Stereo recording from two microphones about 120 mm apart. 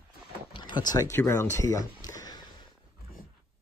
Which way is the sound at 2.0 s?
30° left (ahead or behind).